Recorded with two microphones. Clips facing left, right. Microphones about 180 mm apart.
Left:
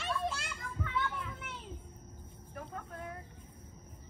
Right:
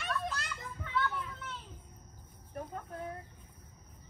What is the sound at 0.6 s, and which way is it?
Children playing, 25° right (ahead or behind).